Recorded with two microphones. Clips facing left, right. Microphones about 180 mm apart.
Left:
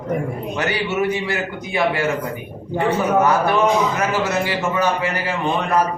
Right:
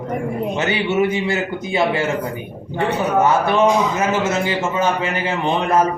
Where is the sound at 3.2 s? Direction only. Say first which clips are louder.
Right 1 dB; 25° right (ahead or behind).